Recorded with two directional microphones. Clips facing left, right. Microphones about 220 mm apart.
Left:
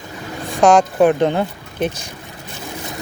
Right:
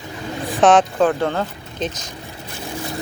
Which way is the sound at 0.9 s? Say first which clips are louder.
Left 4 dB; 15° left (ahead or behind).